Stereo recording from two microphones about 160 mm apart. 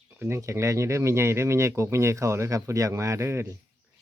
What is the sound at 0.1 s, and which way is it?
Speech, 15° right (ahead or behind).